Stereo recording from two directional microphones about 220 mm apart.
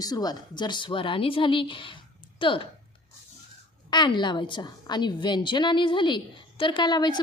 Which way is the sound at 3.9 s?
20° left (ahead or behind).